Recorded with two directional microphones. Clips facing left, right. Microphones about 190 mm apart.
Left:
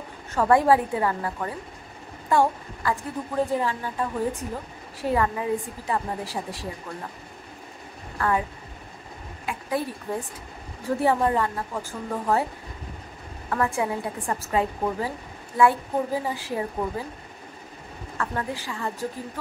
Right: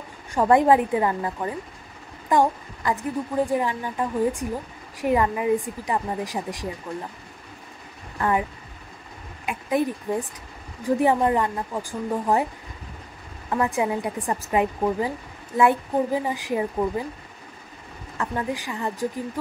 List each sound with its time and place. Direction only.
0.3 s a woman's voice: 20° right (ahead or behind)
8.2 s a woman's voice: 20° right (ahead or behind)
9.5 s a woman's voice: 20° right (ahead or behind)
13.5 s a woman's voice: 20° right (ahead or behind)
18.1 s a woman's voice: 15° right (ahead or behind)